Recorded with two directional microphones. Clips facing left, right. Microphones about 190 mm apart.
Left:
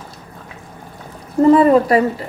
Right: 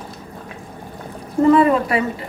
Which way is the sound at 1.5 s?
40° left (ahead or behind).